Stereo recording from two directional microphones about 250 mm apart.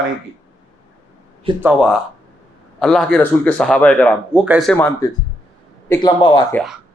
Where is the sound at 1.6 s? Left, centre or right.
Centre.